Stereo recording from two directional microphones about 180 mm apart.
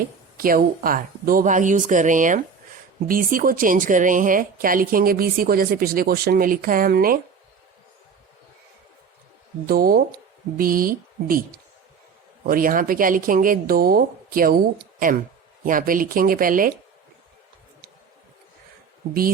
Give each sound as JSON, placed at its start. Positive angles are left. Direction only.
{"t": 0.3, "sound": "a woman's voice", "side_deg": -55}
{"t": 9.6, "sound": "a woman's voice", "side_deg": -55}
{"t": 12.5, "sound": "a woman's voice", "side_deg": -50}
{"t": 15.6, "sound": "a woman's voice", "side_deg": -50}